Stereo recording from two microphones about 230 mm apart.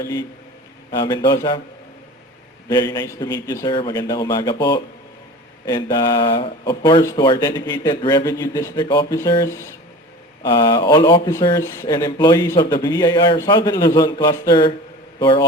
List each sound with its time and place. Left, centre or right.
0.0 s speech: centre
2.6 s speech: centre